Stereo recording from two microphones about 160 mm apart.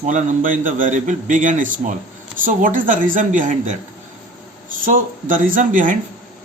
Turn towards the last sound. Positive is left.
turn(degrees=-55)  # may be behind; listen again after turning